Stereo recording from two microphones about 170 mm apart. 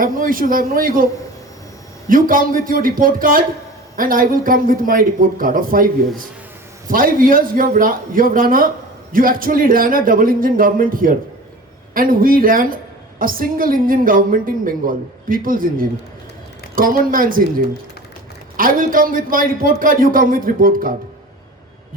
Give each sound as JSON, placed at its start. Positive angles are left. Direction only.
{"t": 0.0, "sound": "a woman's voice", "side_deg": -55}
{"t": 2.0, "sound": "a woman's voice", "side_deg": -55}
{"t": 18.5, "sound": "a woman's voice", "side_deg": -55}